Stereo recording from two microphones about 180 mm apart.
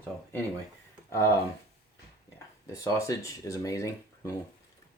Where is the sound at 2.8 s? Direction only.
20° left (ahead or behind).